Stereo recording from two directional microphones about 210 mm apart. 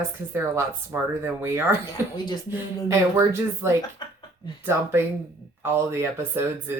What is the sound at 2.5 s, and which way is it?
Speech, 10° right (ahead or behind).